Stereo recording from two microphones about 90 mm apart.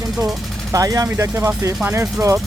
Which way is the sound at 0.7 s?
40° right (ahead or behind).